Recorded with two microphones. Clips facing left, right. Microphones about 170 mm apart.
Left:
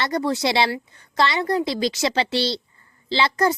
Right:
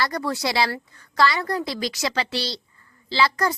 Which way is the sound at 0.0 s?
25° left (ahead or behind).